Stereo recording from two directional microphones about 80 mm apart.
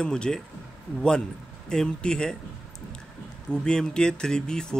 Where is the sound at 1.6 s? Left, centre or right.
Centre.